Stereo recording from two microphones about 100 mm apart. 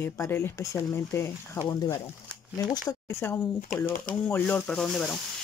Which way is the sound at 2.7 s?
30° left (ahead or behind).